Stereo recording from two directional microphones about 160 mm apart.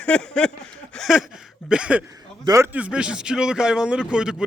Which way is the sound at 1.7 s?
5° right (ahead or behind).